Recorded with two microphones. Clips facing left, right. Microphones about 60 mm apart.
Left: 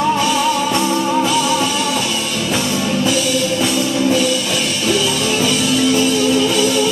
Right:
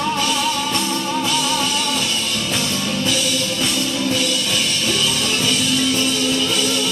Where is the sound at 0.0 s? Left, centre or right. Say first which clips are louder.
Left 5 dB; centre.